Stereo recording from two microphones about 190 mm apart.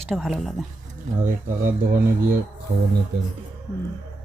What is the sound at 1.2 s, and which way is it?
Speech, 45° right (ahead or behind).